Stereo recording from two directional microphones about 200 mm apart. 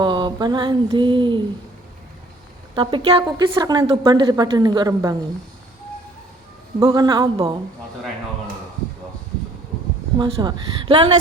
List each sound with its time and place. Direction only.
0.0 s a woman's voice: 20° right (ahead or behind)
2.7 s a woman's voice: 25° right (ahead or behind)
6.7 s a woman's voice: 20° right (ahead or behind)
10.2 s a woman's voice: 20° right (ahead or behind)